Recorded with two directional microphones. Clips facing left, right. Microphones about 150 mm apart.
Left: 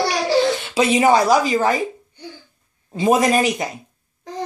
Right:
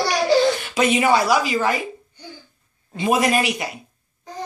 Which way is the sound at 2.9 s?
35° left (ahead or behind).